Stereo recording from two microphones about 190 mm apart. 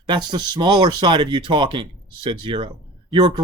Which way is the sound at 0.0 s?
25° right (ahead or behind).